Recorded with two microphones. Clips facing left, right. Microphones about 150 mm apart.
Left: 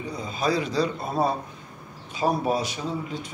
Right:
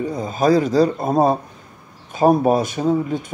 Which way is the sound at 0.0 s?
45° right (ahead or behind).